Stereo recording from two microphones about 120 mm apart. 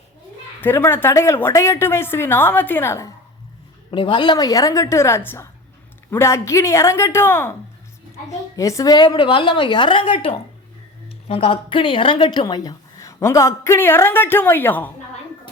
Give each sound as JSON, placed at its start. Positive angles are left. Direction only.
{"t": 0.6, "sound": "a woman's voice", "side_deg": 20}
{"t": 3.9, "sound": "a woman's voice", "side_deg": 40}
{"t": 8.5, "sound": "a woman's voice", "side_deg": 25}